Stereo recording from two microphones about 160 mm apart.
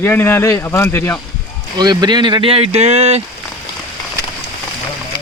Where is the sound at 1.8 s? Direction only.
25° right (ahead or behind); by 3.2 s 40° right (ahead or behind).